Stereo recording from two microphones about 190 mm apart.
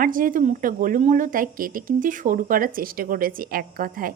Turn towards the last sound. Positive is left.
turn(degrees=-45)  # may be behind; listen again after turning